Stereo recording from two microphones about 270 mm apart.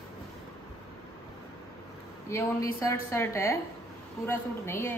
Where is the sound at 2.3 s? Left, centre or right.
Centre.